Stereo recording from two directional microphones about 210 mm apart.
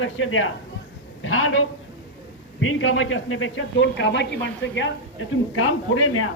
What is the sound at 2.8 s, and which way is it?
Speech, 65° left (ahead or behind).